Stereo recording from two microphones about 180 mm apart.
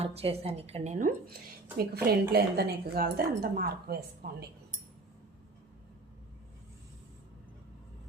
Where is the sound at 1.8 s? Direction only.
60° right (ahead or behind).